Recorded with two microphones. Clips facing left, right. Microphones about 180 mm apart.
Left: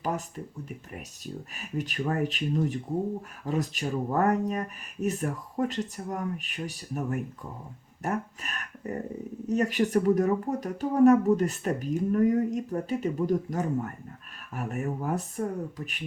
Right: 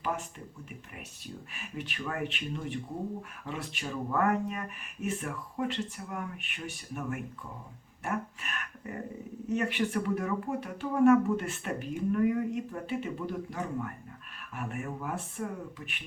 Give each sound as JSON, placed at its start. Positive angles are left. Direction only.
{"t": 0.9, "sound": "speech", "side_deg": 40}